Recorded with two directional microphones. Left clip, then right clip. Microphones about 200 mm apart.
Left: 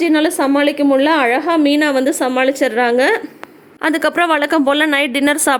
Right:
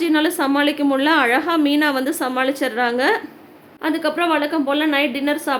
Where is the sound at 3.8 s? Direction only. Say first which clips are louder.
Left 5 dB; 55° left (ahead or behind).